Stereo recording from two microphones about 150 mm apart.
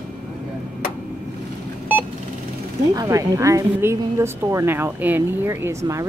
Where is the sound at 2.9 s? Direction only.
20° right (ahead or behind).